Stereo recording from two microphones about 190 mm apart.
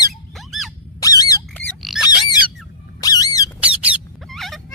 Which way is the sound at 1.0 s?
20° left (ahead or behind).